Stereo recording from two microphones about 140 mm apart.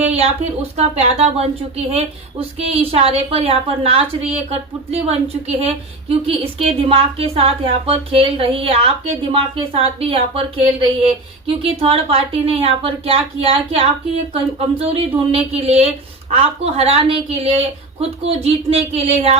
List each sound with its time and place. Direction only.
0.8 s a woman's voice: 45° right (ahead or behind)